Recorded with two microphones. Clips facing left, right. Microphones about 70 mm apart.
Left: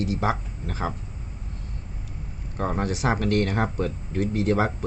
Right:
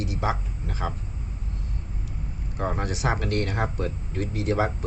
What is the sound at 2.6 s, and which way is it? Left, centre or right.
Speech, left.